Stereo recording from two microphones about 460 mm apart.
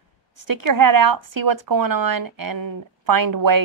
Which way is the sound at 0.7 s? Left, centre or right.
Right.